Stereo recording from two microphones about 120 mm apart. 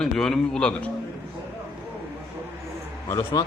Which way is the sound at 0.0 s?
5° left (ahead or behind).